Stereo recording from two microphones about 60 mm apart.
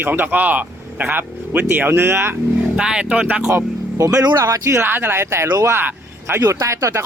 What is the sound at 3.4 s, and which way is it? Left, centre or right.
Speech, right.